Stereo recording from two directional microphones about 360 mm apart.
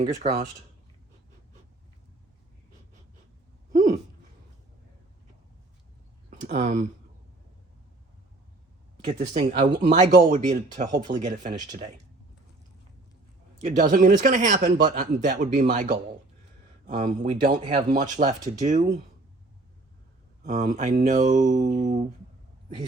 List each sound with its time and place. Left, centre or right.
0.0 s speech: centre
3.7 s a sound: centre
6.4 s speech: right
9.1 s speech: right
13.6 s speech: centre
20.4 s speech: right